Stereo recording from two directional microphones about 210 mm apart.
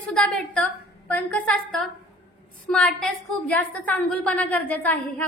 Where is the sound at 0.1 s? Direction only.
5° left (ahead or behind).